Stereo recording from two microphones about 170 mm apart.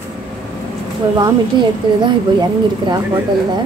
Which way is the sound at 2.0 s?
25° right (ahead or behind).